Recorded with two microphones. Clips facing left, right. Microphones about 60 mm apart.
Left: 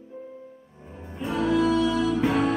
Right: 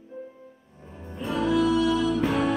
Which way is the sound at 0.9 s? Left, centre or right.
Centre.